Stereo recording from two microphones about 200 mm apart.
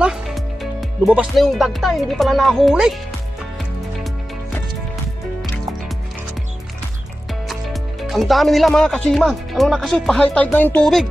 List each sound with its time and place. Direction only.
0.0 s speech: centre (ahead or behind)
7.4 s speech: centre (ahead or behind)